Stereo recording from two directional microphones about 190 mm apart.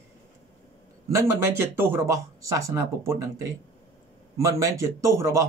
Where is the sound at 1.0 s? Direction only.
15° right (ahead or behind).